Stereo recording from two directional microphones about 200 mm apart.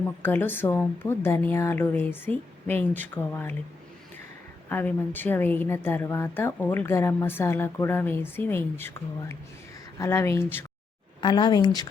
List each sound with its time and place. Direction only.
0.2 s a woman's voice: 10° left (ahead or behind)
4.7 s a woman's voice: 10° left (ahead or behind)
10.0 s a woman's voice: 15° left (ahead or behind)
11.2 s speech: 25° left (ahead or behind)